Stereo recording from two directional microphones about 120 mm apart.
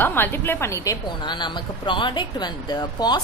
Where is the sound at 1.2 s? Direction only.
40° left (ahead or behind).